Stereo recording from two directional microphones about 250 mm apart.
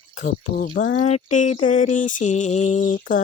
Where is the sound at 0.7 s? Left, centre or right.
Left.